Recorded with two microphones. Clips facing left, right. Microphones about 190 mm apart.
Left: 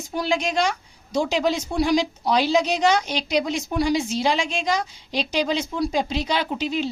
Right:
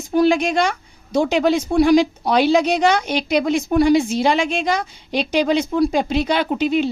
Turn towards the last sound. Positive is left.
turn(degrees=-55)  # may be behind; listen again after turning